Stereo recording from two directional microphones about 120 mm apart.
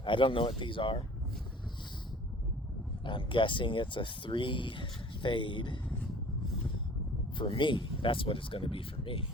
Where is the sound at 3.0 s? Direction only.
45° left (ahead or behind).